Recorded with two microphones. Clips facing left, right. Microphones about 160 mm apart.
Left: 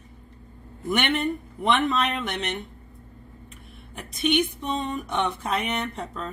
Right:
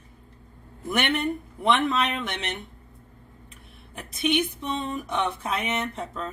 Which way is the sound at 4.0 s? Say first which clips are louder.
Left 1 dB; centre (ahead or behind).